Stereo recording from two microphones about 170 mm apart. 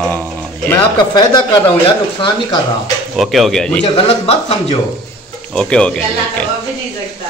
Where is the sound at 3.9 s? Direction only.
35° left (ahead or behind).